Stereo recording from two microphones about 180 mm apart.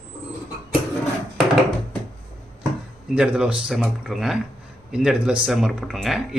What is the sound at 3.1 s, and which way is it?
Speech, 5° right (ahead or behind).